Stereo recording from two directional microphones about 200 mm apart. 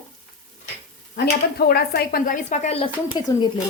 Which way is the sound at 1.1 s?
55° left (ahead or behind).